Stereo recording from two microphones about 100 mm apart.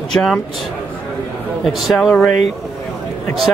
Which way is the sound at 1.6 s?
Centre (ahead or behind).